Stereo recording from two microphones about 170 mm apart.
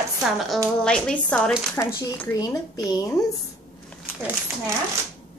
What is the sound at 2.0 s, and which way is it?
Speech, 20° left (ahead or behind).